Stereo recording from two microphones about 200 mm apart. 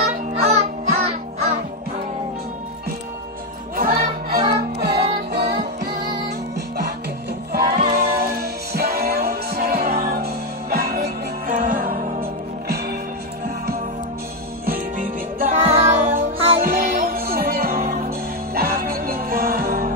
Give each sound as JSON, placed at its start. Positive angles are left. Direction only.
{"t": 0.0, "sound": "music", "side_deg": -35}
{"t": 3.7, "sound": "music", "side_deg": -45}
{"t": 7.5, "sound": "music", "side_deg": -50}
{"t": 14.7, "sound": "music", "side_deg": -45}
{"t": 15.6, "sound": "music", "side_deg": -30}
{"t": 16.6, "sound": "music", "side_deg": -45}